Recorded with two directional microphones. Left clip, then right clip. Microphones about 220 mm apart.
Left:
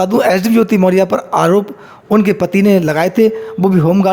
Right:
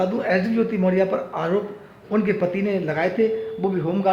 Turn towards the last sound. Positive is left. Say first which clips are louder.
# left 10 dB
turn(degrees=55)  # may be behind; listen again after turning